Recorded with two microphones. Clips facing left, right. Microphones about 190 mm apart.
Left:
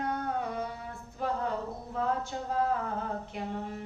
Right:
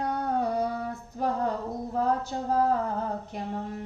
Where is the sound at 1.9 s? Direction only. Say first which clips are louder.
Right 4 dB; 40° right (ahead or behind).